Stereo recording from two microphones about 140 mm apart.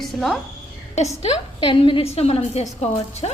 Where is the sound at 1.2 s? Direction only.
40° left (ahead or behind).